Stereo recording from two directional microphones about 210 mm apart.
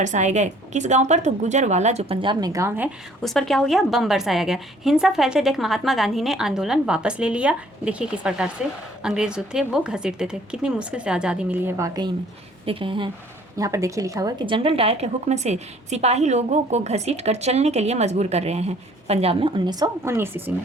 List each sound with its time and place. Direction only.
0.0 s a woman's voice: 35° right (ahead or behind)
13.6 s a woman's voice: 15° right (ahead or behind)